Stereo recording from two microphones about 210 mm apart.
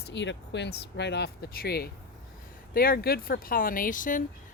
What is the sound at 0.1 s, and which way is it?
Speech, 55° left (ahead or behind).